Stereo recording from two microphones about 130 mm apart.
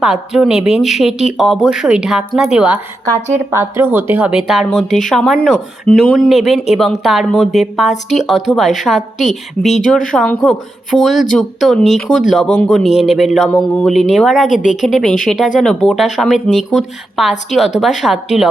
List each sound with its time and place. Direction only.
0.0 s speech: 5° right (ahead or behind)
3.1 s a woman's voice: 15° left (ahead or behind)
3.5 s speech: 20° right (ahead or behind); by 14.5 s centre (ahead or behind)
14.5 s a woman's voice: 75° left (ahead or behind)
14.8 s speech: centre (ahead or behind)